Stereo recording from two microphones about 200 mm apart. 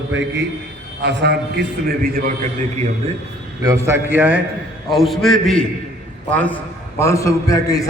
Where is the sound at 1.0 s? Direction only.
55° right (ahead or behind).